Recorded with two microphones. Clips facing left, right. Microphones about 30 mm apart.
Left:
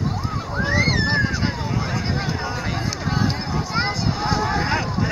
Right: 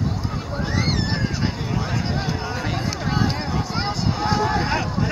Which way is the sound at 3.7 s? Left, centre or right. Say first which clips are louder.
Left 4 dB; centre.